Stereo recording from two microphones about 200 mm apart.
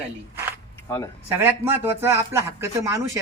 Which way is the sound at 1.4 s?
10° right (ahead or behind).